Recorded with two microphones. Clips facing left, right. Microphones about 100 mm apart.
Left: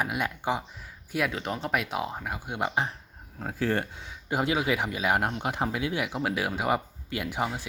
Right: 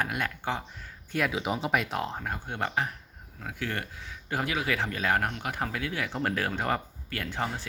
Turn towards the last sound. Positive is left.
turn(degrees=15)  # may be behind; listen again after turning